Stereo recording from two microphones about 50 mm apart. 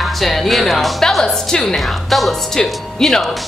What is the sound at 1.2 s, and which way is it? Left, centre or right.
A woman's voice, centre.